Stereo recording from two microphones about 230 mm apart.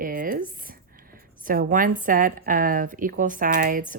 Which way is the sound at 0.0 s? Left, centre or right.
Right.